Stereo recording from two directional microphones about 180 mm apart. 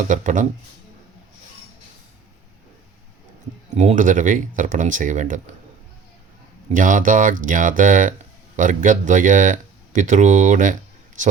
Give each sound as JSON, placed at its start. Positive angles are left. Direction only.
{"t": 0.1, "sound": "speech", "side_deg": -45}
{"t": 3.8, "sound": "speech", "side_deg": -45}
{"t": 6.7, "sound": "speech", "side_deg": -45}